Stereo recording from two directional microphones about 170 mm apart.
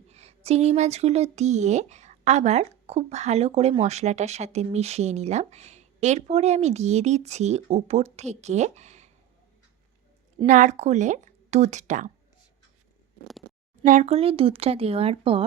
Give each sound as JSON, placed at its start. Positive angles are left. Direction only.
{"t": 0.1, "sound": "speech", "side_deg": -40}
{"t": 10.4, "sound": "a woman's voice", "side_deg": -45}
{"t": 13.8, "sound": "speech", "side_deg": -45}